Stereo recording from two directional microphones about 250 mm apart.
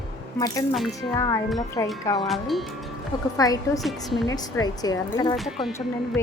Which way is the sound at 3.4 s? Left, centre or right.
Centre.